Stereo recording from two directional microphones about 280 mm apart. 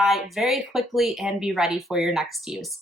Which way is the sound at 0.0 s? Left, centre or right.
Centre.